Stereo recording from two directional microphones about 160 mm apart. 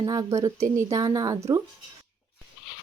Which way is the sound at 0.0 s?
25° right (ahead or behind).